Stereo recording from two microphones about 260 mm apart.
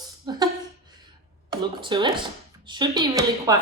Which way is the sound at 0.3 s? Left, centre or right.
Centre.